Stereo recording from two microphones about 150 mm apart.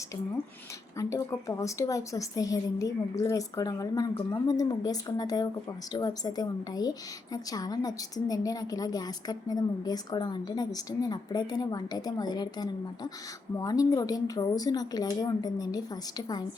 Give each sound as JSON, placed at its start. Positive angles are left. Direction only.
{"t": 0.9, "sound": "a woman's voice", "side_deg": 20}